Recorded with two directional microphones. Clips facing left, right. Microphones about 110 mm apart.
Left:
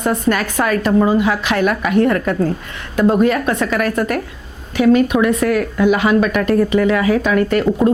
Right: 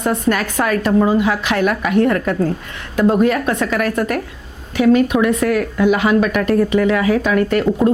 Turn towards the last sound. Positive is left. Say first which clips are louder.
# left 1 dB
turn(degrees=25)  # may be behind; listen again after turning